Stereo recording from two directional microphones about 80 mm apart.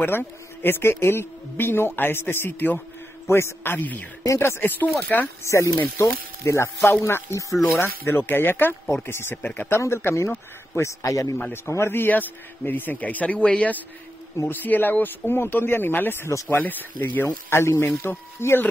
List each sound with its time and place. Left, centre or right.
0.0 s speech: left
5.4 s speech: left
9.8 s speech: left
11.0 s a man's voice: left